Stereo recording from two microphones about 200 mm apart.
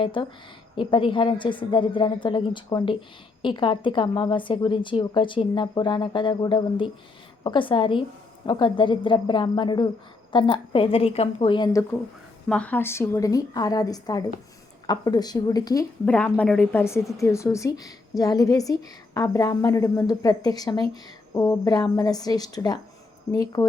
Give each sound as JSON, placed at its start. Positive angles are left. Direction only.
{"t": 0.0, "sound": "speech", "side_deg": 25}
{"t": 12.5, "sound": "a woman's voice", "side_deg": 5}
{"t": 16.0, "sound": "a woman's voice", "side_deg": 5}